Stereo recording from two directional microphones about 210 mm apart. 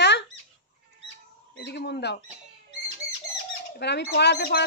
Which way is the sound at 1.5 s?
50° left (ahead or behind).